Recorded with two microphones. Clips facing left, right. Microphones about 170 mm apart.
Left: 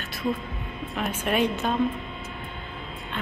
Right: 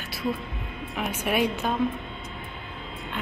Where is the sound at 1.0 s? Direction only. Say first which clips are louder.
Left 1 dB; 10° right (ahead or behind).